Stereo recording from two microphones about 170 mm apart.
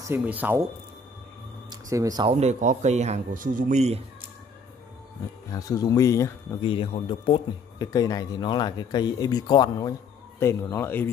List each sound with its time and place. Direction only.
0.0 s speech: 10° right (ahead or behind)
1.7 s speech: 20° right (ahead or behind)
2.3 s speech: 45° right (ahead or behind)
5.5 s speech: 20° left (ahead or behind)
6.6 s a man's voice: 30° left (ahead or behind)
7.8 s speech: 20° left (ahead or behind)